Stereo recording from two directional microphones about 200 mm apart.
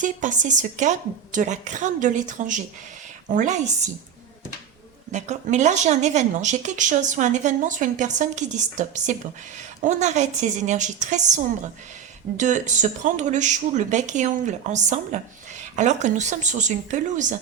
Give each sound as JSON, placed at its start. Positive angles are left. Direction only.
{"t": 0.0, "sound": "speech", "side_deg": -40}
{"t": 5.1, "sound": "speech", "side_deg": -35}